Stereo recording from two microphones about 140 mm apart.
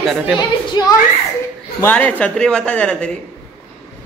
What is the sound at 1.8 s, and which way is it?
Speech, 10° left (ahead or behind).